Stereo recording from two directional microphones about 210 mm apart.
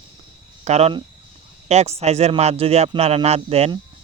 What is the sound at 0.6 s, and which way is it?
A man's voice, 30° right (ahead or behind).